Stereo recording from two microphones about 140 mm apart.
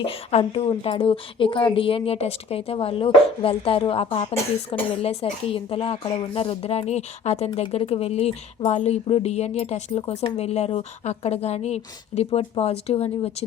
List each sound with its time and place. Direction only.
0.0 s speech: 45° left (ahead or behind)